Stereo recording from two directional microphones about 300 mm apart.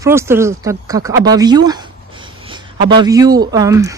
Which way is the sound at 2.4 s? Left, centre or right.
Centre.